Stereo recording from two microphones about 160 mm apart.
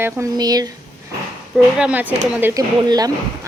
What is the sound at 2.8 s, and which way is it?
Speech, 25° right (ahead or behind).